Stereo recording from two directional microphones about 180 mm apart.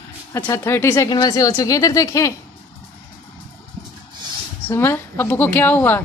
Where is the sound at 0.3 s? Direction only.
15° left (ahead or behind).